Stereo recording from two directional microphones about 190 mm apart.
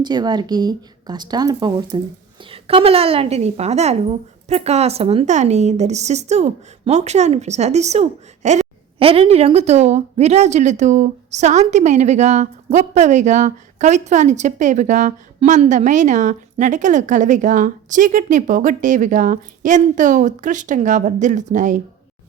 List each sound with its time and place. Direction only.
0.0 s speech: 20° right (ahead or behind); by 21.8 s 40° right (ahead or behind)